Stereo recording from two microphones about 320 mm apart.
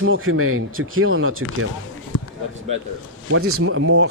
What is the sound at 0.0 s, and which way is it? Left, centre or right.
Speech, right.